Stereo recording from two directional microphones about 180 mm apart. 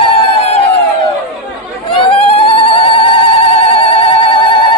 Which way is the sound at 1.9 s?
30° left (ahead or behind).